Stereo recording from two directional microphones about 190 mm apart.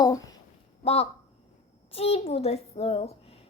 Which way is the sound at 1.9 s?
30° left (ahead or behind).